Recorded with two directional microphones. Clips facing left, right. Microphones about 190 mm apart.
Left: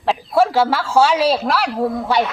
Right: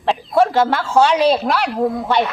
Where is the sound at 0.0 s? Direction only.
5° left (ahead or behind).